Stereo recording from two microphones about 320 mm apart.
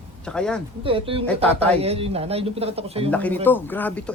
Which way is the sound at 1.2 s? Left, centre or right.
Centre.